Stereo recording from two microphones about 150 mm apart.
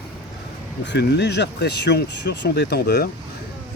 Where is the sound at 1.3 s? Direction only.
90° left.